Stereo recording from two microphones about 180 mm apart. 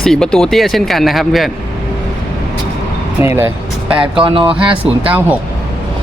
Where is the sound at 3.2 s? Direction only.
15° right (ahead or behind).